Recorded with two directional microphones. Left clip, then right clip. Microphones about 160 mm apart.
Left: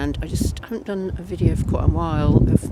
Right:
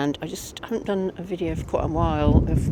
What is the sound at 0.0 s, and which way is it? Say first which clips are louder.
Speech: left 1 dB; 25° left (ahead or behind).